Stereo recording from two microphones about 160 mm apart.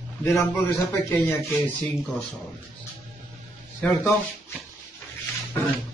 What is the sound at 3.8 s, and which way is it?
Speech, 10° left (ahead or behind).